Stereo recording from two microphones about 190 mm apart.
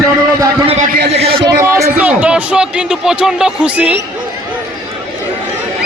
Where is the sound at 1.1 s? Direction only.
30° right (ahead or behind).